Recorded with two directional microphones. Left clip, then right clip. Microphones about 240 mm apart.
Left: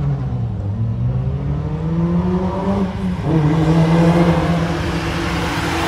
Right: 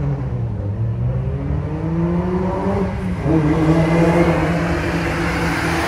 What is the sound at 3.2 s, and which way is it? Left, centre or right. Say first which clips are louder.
Vehicle: right 2 dB; centre.